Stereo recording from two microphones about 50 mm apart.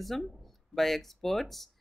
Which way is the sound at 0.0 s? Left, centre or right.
Centre.